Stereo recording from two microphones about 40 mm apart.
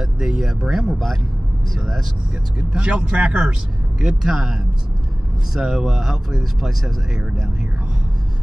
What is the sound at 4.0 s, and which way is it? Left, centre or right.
Speech, centre.